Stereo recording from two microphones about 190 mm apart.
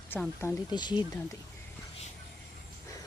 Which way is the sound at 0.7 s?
25° left (ahead or behind).